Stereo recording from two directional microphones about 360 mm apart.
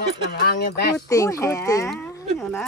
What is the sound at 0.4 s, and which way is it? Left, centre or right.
Speech, left.